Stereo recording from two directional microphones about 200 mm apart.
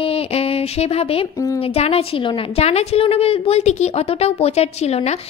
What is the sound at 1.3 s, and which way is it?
Speech, 15° left (ahead or behind).